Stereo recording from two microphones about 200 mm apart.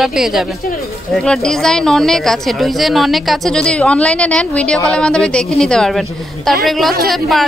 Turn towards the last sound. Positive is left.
turn(degrees=0)  # may be behind; listen again after turning